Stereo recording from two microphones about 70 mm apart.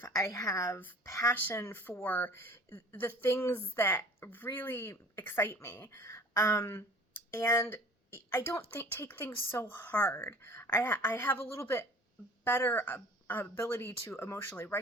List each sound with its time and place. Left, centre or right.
0.2 s a woman's voice: left
0.7 s speech: left
1.0 s speech: left
1.3 s speech: left
2.0 s speech: left
2.3 s speech: left
13.6 s speech: left